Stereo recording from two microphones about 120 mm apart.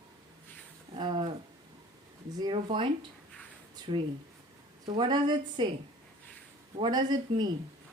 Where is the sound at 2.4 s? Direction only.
45° right (ahead or behind).